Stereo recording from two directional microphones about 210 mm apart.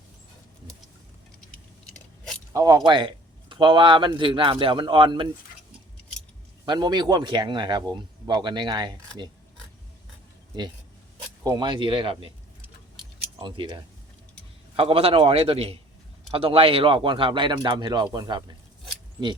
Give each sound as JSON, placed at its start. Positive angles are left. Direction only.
{"t": 2.5, "sound": "speech", "side_deg": -15}
{"t": 6.7, "sound": "speech", "side_deg": -20}
{"t": 11.4, "sound": "speech", "side_deg": -20}
{"t": 13.4, "sound": "speech", "side_deg": -20}
{"t": 14.8, "sound": "speech", "side_deg": -25}